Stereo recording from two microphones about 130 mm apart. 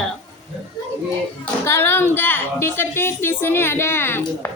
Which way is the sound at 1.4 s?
20° left (ahead or behind).